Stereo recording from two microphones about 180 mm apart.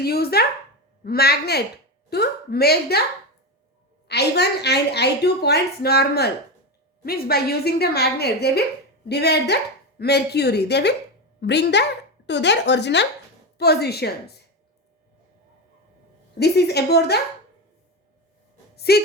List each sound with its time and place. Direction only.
0.0 s a woman's voice: 60° left (ahead or behind)
4.1 s a woman's voice: 65° left (ahead or behind)
16.4 s a woman's voice: 65° left (ahead or behind)
18.8 s speech: 60° left (ahead or behind)